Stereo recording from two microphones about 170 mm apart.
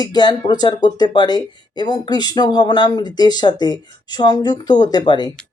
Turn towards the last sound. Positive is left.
turn(degrees=25)  # may be behind; listen again after turning